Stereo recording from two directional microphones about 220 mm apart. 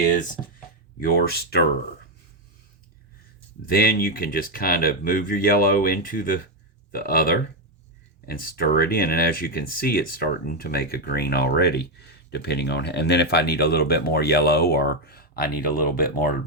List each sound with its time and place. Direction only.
0.9 s speech: 45° left (ahead or behind)
3.7 s speech: 40° left (ahead or behind)